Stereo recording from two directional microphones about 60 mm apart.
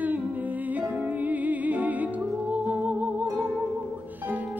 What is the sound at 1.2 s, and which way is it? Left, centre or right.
Music, right.